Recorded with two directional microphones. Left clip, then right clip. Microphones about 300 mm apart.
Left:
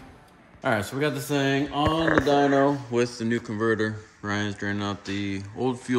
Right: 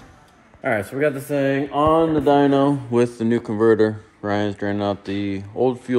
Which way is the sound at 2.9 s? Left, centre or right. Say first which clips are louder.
Right 6 dB; centre.